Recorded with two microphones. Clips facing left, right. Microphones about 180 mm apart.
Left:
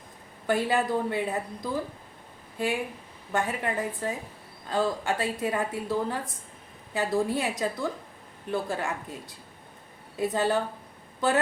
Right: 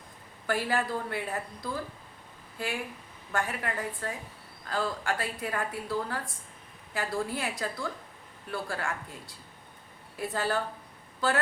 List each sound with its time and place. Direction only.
0.4 s a woman's voice: 20° left (ahead or behind)
3.3 s a woman's voice: 20° left (ahead or behind)